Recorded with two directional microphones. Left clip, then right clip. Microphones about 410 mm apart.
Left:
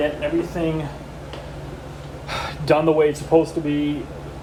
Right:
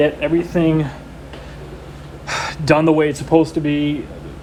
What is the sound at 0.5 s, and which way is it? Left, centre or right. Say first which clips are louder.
Speech: right 7 dB; centre.